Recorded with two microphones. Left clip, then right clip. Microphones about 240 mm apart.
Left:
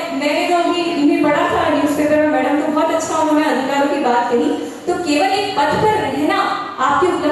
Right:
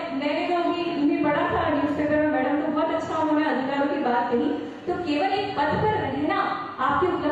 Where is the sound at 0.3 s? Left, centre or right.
Centre.